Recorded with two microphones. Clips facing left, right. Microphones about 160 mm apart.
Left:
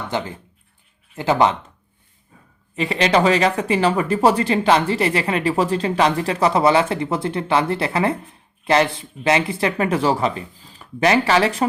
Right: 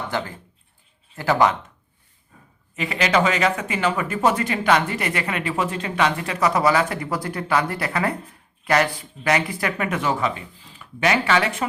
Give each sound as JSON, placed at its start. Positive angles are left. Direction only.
{"t": 0.1, "sound": "speech", "side_deg": 20}
{"t": 2.7, "sound": "speech", "side_deg": 30}